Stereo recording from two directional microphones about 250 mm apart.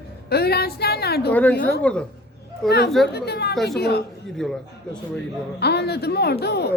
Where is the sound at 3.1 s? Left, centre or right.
Left.